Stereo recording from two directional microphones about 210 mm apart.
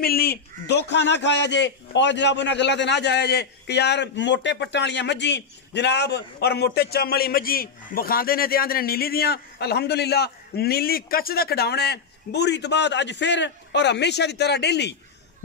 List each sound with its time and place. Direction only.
0.0 s a man's voice: 45° left (ahead or behind)